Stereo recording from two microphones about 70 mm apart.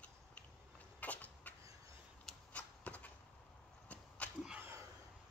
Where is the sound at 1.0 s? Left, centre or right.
Left.